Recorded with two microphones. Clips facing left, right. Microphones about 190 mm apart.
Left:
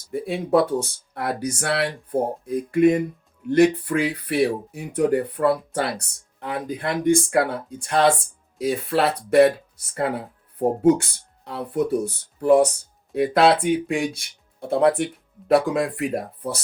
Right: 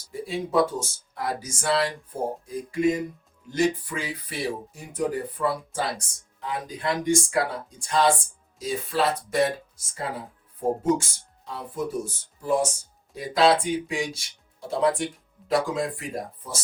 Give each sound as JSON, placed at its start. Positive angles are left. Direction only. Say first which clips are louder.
{"t": 0.1, "sound": "speech", "louder": "left 6 dB", "side_deg": 60}